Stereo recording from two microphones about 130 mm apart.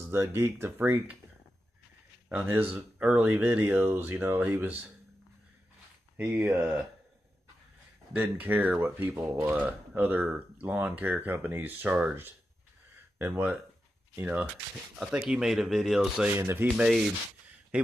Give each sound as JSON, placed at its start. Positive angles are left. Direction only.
{"t": 0.0, "sound": "speech", "side_deg": -20}
{"t": 2.2, "sound": "speech", "side_deg": -15}
{"t": 6.1, "sound": "speech", "side_deg": -10}
{"t": 8.1, "sound": "speech", "side_deg": -15}
{"t": 16.3, "sound": "speech", "side_deg": -15}